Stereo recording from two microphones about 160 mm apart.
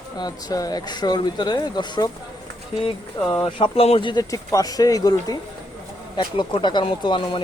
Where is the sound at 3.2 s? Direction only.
30° left (ahead or behind).